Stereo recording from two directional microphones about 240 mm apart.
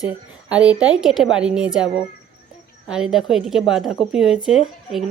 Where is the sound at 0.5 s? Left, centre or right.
Centre.